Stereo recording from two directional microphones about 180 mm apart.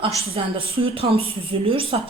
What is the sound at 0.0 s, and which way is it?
A woman's voice, 30° right (ahead or behind).